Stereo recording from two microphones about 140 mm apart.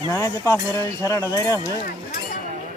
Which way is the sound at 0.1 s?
20° left (ahead or behind).